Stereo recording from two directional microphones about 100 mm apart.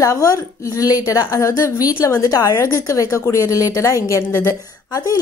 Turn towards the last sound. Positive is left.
turn(degrees=30)  # may be behind; listen again after turning